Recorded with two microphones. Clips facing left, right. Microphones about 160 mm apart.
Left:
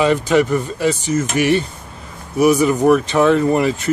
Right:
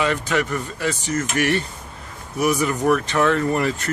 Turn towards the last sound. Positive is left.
turn(degrees=20)  # may be behind; listen again after turning